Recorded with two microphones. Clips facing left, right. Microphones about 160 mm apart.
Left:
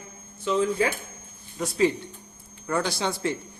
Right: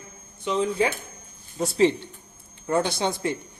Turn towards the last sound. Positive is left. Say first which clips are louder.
# right 1 dB
turn(degrees=-20)  # may be behind; listen again after turning